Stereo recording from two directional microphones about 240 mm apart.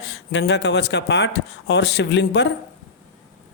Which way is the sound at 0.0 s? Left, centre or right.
Left.